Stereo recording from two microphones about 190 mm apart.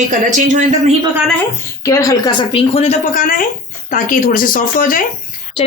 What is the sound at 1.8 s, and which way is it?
A woman's voice, 15° left (ahead or behind).